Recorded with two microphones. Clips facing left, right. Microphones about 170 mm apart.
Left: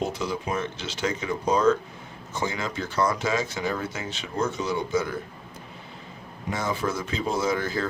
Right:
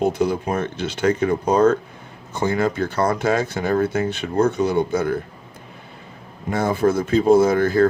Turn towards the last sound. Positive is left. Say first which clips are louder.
# right 10 dB
turn(degrees=-55)  # may be behind; listen again after turning